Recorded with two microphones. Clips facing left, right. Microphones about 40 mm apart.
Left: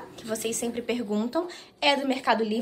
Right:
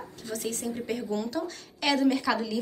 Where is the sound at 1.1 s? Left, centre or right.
Left.